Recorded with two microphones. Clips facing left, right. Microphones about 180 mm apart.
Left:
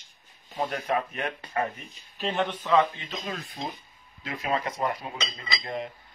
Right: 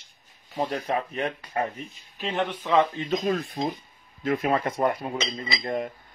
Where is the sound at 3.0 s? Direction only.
45° right (ahead or behind).